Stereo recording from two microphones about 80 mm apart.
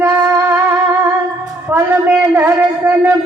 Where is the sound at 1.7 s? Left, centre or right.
Right.